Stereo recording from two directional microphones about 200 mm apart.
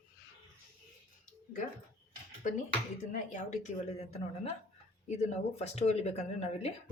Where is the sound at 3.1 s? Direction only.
35° left (ahead or behind).